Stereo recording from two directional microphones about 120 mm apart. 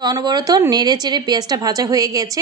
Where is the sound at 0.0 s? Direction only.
35° right (ahead or behind).